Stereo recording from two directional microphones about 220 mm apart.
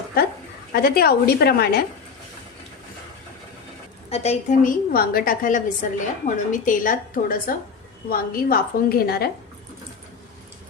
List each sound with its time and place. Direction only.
0.2 s a woman's voice: 45° left (ahead or behind)
4.1 s a woman's voice: 30° left (ahead or behind); by 9.3 s 45° left (ahead or behind)